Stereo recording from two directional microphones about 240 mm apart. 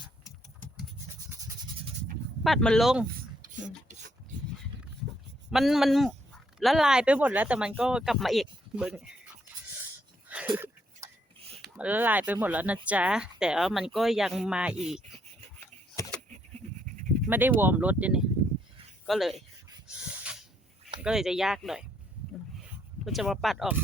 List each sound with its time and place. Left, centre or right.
2.4 s speech: centre
3.4 s filing: right
5.5 s speech: centre
10.2 s a sound: centre
11.6 s speech: centre
17.2 s speech: centre
19.9 s dog: centre
21.0 s speech: centre
23.0 s speech: centre